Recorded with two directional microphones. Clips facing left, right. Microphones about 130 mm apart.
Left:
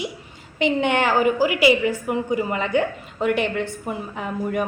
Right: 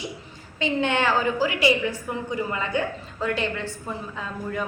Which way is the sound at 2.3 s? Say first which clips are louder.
Left 4 dB; 70° left (ahead or behind).